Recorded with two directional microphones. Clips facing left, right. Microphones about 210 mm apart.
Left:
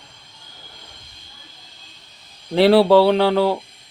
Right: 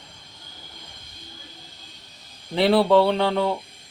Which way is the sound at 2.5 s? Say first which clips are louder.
Left 5 dB; 80° left.